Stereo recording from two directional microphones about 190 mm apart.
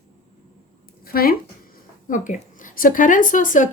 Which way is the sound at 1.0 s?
50° left (ahead or behind).